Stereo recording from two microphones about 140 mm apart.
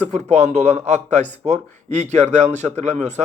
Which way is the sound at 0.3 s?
55° right (ahead or behind).